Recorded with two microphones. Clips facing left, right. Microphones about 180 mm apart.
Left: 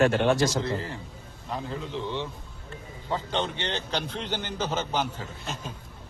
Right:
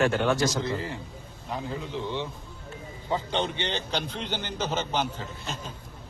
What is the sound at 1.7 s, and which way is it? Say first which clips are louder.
A man's voice: right 1 dB; 10° right (ahead or behind).